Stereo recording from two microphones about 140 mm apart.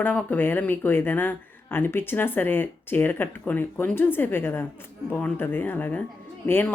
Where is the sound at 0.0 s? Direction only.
10° left (ahead or behind).